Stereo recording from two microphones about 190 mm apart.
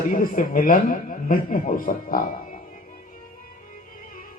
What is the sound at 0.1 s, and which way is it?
A man's voice, 45° left (ahead or behind).